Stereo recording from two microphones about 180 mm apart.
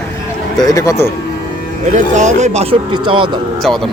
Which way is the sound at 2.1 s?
40° right (ahead or behind).